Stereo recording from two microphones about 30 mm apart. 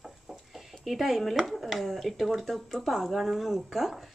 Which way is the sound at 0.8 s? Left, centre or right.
Centre.